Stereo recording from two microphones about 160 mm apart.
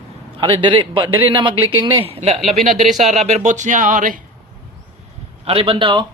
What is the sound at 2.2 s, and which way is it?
Speech, 40° right (ahead or behind).